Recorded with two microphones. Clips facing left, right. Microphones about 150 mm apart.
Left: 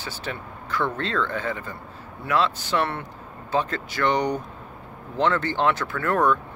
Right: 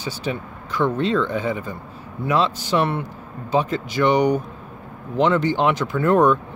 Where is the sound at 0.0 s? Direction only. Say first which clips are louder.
Right 6 dB; 15° right (ahead or behind).